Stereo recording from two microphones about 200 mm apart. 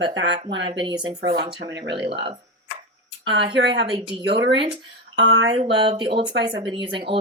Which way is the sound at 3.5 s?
60° right (ahead or behind).